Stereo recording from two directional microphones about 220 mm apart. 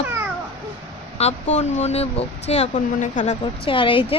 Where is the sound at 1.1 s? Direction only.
30° left (ahead or behind).